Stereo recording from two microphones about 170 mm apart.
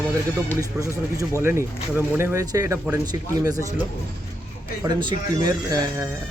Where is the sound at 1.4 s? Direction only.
15° right (ahead or behind).